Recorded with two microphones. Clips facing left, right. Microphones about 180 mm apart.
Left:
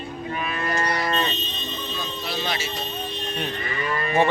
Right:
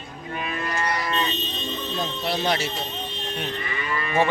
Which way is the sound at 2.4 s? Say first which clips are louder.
Right 5 dB; 55° right (ahead or behind).